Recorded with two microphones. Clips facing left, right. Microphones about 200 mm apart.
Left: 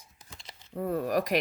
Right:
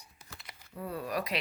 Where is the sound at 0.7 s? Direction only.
45° left (ahead or behind).